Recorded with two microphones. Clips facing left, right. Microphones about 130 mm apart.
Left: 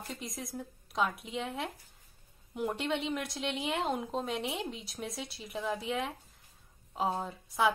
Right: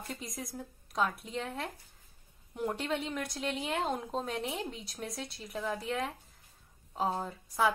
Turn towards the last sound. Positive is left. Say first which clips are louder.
# even
turn(degrees=0)  # may be behind; listen again after turning